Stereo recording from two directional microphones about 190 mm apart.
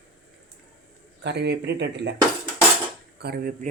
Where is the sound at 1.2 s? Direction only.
60° right (ahead or behind).